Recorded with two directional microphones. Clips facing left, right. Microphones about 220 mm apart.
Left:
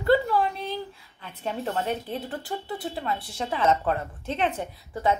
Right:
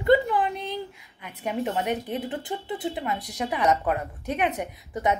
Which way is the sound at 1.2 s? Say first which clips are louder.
Right 2 dB; 15° right (ahead or behind).